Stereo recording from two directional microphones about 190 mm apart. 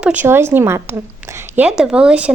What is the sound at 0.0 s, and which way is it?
A woman's voice, 10° right (ahead or behind).